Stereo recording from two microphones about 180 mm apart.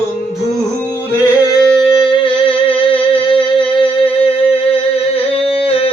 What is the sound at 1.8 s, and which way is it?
Music, 25° left (ahead or behind).